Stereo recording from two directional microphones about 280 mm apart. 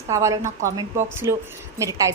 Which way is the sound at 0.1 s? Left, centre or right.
Centre.